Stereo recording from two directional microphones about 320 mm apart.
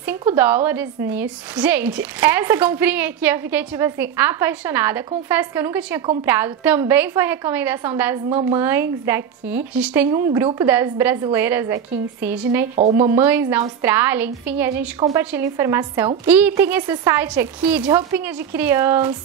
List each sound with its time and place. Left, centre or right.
0.0 s a woman's voice: centre
8.3 s a woman's voice: centre
8.5 s a woman's voice: centre